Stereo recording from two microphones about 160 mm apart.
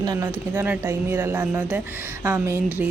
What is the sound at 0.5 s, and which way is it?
Speech, 10° right (ahead or behind).